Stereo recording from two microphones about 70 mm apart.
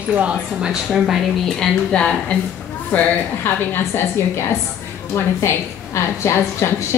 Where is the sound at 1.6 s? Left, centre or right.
Centre.